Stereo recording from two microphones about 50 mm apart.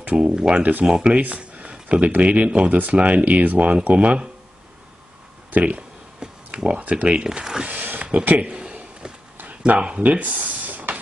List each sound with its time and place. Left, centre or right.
0.2 s speech: centre
5.5 s speech: right
6.1 s speech: centre
7.2 s speech: centre
7.6 s a sound: right
9.8 s speech: right
10.0 s a sound: right